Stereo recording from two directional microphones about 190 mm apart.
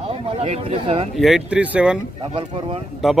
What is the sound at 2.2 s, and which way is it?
Speech, 30° right (ahead or behind).